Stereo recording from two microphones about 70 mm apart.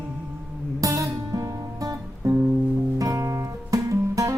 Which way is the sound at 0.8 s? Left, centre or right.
Right.